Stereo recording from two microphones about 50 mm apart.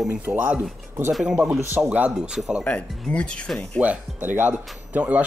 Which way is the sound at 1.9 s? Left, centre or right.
Right.